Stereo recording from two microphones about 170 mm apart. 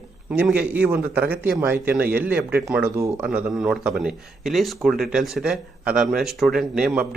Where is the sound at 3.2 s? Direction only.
5° right (ahead or behind).